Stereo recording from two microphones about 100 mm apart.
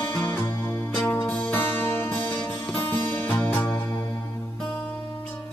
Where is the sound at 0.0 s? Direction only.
20° left (ahead or behind).